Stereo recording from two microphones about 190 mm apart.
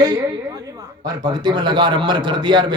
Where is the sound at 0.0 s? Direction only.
20° right (ahead or behind).